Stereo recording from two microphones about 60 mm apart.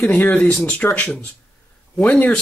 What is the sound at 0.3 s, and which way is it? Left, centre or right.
Speech, left.